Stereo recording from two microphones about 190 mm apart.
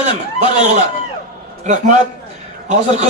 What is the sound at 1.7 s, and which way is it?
Speech, 40° right (ahead or behind).